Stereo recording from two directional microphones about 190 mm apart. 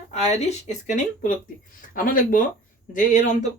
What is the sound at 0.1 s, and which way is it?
Speech, 35° left (ahead or behind).